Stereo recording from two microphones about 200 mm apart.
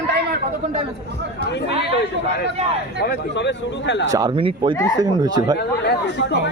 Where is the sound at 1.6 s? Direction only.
55° left (ahead or behind).